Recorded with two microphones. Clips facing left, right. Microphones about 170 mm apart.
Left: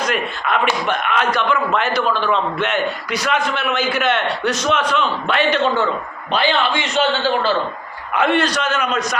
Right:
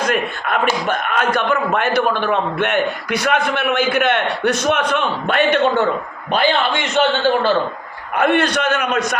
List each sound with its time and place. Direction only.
0.4 s a man's voice: 45° right (ahead or behind)